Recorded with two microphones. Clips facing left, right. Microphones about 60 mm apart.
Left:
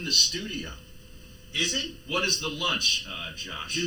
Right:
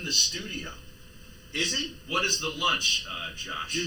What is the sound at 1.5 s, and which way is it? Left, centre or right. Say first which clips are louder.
Speech: even; right.